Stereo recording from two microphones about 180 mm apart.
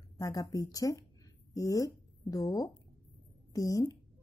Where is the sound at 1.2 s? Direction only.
20° left (ahead or behind).